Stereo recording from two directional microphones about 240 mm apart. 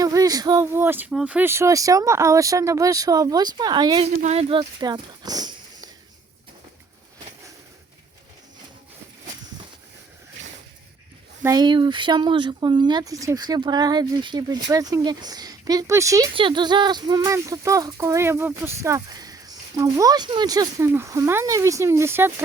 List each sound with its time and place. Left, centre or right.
0.0 s speech: centre
11.4 s speech: centre